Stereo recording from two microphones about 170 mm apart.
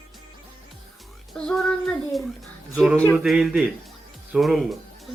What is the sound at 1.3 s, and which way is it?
Speech, 5° left (ahead or behind).